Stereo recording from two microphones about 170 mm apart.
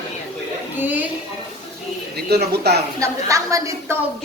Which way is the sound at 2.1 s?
70° right (ahead or behind).